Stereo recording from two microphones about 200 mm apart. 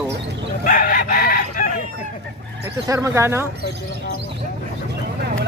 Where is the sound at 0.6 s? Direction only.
45° left (ahead or behind).